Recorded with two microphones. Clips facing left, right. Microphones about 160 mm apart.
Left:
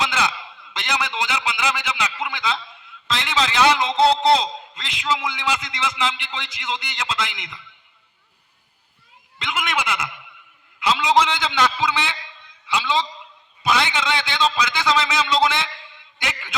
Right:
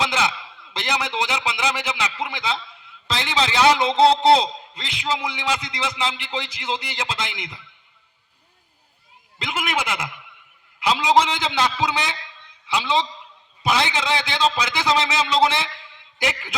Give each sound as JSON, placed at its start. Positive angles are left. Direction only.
{"t": 0.7, "sound": "a man's voice", "side_deg": -30}
{"t": 9.4, "sound": "a man's voice", "side_deg": -35}
{"t": 12.7, "sound": "a man's voice", "side_deg": -30}